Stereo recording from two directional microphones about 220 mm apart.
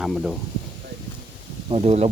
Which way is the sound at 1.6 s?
30° right (ahead or behind).